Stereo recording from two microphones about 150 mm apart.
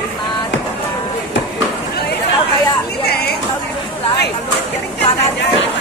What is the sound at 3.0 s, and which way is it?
Speech, 90° left.